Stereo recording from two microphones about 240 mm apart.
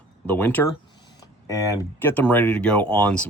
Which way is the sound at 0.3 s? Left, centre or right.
Centre.